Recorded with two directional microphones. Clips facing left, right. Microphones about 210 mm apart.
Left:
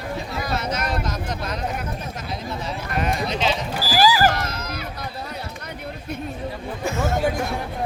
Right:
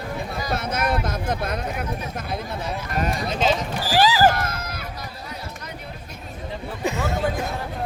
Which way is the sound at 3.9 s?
25° right (ahead or behind).